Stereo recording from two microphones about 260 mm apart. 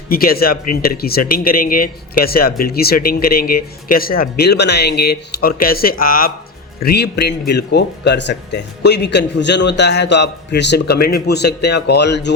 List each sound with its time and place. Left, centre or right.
0.1 s a man's voice: left